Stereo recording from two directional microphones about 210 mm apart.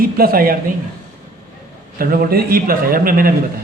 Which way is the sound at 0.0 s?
45° right (ahead or behind).